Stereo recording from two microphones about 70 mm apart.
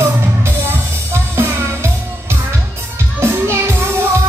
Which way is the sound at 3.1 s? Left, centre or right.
Right.